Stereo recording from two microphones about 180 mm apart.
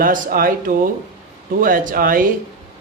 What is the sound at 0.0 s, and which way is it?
Speech, 50° right (ahead or behind).